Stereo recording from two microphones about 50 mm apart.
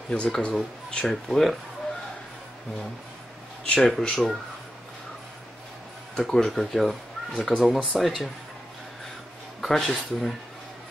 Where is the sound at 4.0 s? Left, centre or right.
Centre.